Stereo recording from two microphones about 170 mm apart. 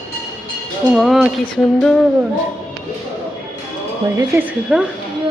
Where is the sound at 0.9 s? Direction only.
Centre (ahead or behind).